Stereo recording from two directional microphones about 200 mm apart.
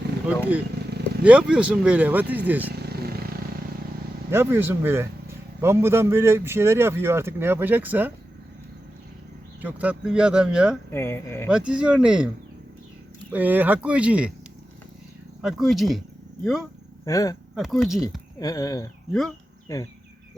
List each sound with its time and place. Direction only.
0.3 s a man's voice: 10° right (ahead or behind)
2.7 s vehicle: 50° right (ahead or behind)
4.3 s a man's voice: 10° right (ahead or behind)
9.6 s speech: 10° right (ahead or behind)
10.9 s speech: 10° left (ahead or behind)
11.5 s speech: 5° right (ahead or behind)
13.3 s a man's voice: 10° right (ahead or behind)
15.4 s speech: centre (ahead or behind)
17.1 s speech: 15° left (ahead or behind)
17.5 s speech: centre (ahead or behind)
18.3 s speech: 15° left (ahead or behind)